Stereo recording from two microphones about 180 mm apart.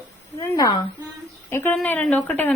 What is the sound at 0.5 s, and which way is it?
A woman's voice, 20° left (ahead or behind).